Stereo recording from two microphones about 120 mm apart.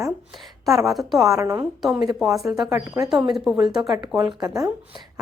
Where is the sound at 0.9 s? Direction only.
Centre (ahead or behind).